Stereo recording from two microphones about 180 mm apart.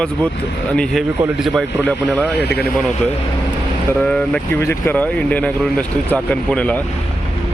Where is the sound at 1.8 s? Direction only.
10° left (ahead or behind).